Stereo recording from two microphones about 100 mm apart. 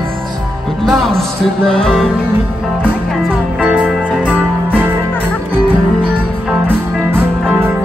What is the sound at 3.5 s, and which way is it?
Music, 10° right (ahead or behind).